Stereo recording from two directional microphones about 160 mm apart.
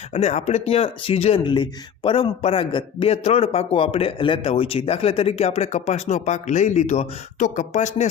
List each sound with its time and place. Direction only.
0.1 s a man's voice: 40° left (ahead or behind)